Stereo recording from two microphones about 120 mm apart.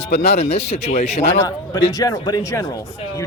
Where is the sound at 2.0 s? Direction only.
30° left (ahead or behind).